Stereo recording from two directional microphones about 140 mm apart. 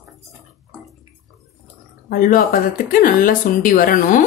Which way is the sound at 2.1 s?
85° left.